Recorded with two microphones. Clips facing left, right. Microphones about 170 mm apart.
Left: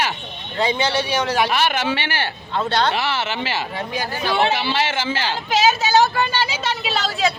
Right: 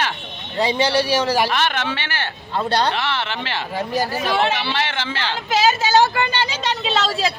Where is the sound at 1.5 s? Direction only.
10° left (ahead or behind).